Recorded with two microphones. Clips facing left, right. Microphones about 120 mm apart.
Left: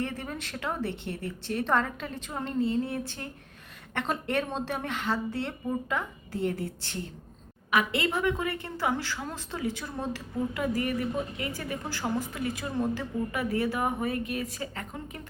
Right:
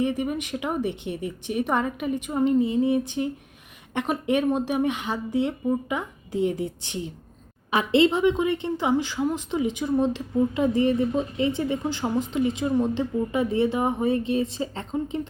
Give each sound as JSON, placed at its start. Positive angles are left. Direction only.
{"t": 0.0, "sound": "speech", "side_deg": -15}
{"t": 7.7, "sound": "a woman's voice", "side_deg": -30}